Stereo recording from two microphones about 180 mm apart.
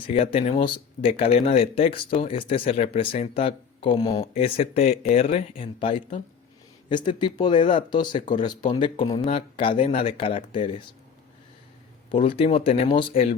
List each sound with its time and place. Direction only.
0.1 s speech: 30° left (ahead or behind)
12.1 s speech: 30° left (ahead or behind)